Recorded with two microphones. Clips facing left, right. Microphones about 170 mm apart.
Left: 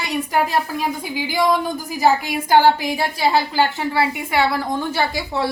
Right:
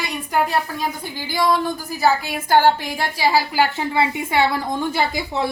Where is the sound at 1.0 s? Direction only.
10° left (ahead or behind); by 3.7 s 10° right (ahead or behind).